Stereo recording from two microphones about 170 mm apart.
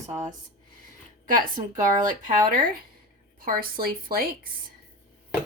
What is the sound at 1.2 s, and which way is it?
Speech, 55° right (ahead or behind).